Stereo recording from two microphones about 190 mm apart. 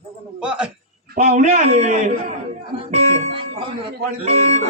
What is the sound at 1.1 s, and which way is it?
A man's voice, 45° right (ahead or behind).